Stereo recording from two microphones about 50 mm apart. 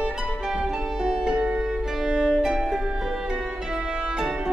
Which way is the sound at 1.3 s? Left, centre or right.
Right.